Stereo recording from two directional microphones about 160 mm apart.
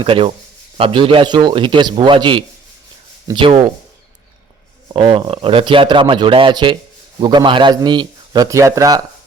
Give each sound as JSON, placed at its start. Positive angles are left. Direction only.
{"t": 0.0, "sound": "speech", "side_deg": -35}
{"t": 4.9, "sound": "a man's voice", "side_deg": -35}